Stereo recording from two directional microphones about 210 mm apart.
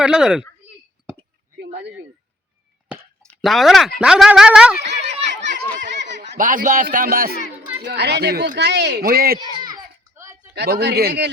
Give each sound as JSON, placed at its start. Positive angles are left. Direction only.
{"t": 0.0, "sound": "a sound", "side_deg": -5}
{"t": 3.2, "sound": "speech", "side_deg": 0}
{"t": 4.9, "sound": "children playing", "side_deg": -55}
{"t": 6.3, "sound": "a man's voice", "side_deg": -40}
{"t": 9.5, "sound": "a sound", "side_deg": -20}
{"t": 10.5, "sound": "speech", "side_deg": -50}